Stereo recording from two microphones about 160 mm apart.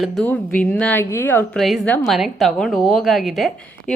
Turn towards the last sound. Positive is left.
turn(degrees=0)  # may be behind; listen again after turning